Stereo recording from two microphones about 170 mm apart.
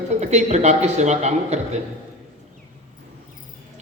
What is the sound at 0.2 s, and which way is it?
A man's voice, 40° right (ahead or behind).